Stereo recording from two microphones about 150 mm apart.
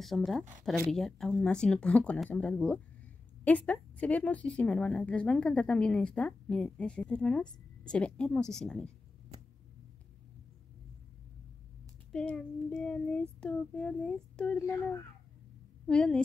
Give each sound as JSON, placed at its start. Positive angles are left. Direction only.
{"t": 0.0, "sound": "a child's voice", "side_deg": 0}
{"t": 12.1, "sound": "a child's voice", "side_deg": 5}
{"t": 15.9, "sound": "a child's voice", "side_deg": 5}